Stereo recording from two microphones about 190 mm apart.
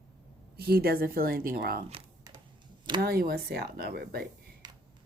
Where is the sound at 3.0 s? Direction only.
55° right (ahead or behind).